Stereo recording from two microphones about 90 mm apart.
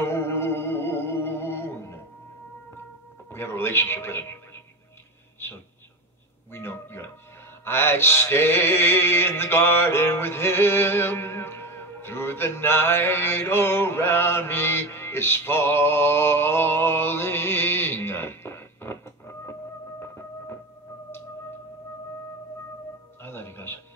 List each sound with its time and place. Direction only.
0.0 s music: 25° left (ahead or behind)
3.3 s speech: 25° left (ahead or behind)
6.5 s speech: 25° left (ahead or behind)
7.6 s mantra: 25° left (ahead or behind)
20.0 s music: 25° left (ahead or behind)
23.2 s music: 25° left (ahead or behind)